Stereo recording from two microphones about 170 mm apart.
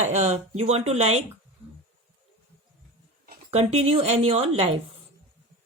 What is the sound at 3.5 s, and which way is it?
Speech, 35° right (ahead or behind).